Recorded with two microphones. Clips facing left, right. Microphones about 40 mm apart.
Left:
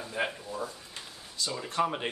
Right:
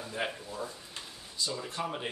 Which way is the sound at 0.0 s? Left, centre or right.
Centre.